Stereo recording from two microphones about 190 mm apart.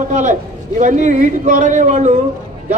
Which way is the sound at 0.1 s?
40° right (ahead or behind).